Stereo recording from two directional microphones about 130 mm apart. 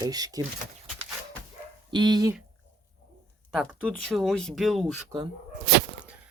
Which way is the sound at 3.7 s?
5° left (ahead or behind).